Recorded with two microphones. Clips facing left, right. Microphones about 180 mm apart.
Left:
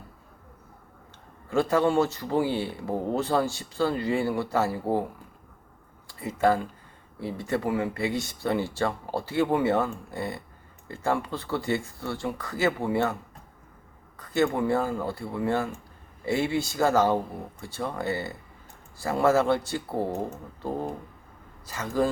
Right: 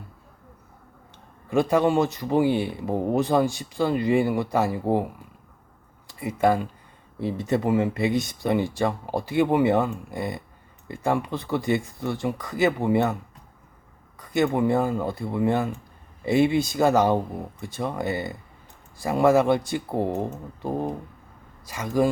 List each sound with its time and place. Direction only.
1.5 s speech: 15° right (ahead or behind)
6.1 s speech: 15° right (ahead or behind)
14.2 s speech: 15° right (ahead or behind)